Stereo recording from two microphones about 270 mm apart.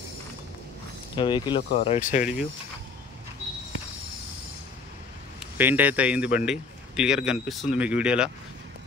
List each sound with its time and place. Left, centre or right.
1.1 s speech: centre
2.0 s speech: left
5.4 s a man's voice: centre